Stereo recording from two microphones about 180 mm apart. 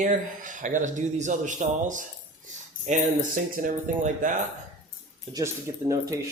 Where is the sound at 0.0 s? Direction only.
45° right (ahead or behind).